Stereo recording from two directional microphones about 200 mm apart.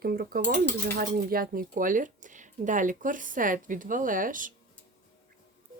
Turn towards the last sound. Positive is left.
turn(degrees=-40)  # may be behind; listen again after turning